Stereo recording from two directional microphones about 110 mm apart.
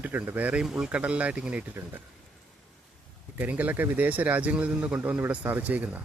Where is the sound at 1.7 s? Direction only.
20° right (ahead or behind).